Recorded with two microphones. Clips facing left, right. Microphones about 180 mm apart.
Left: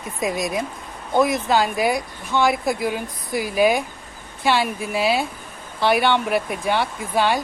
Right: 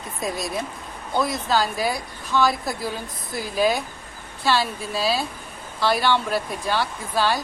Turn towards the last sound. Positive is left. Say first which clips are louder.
# left 2 dB
turn(degrees=20)  # may be behind; listen again after turning